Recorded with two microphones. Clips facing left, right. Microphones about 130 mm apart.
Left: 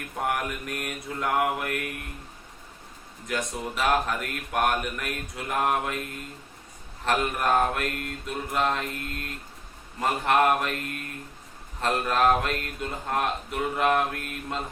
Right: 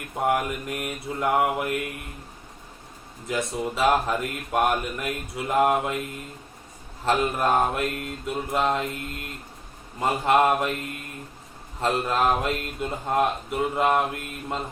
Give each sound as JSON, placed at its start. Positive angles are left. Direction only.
{"t": 0.3, "sound": "speech", "side_deg": -20}
{"t": 3.2, "sound": "speech", "side_deg": -20}
{"t": 11.8, "sound": "speech", "side_deg": -25}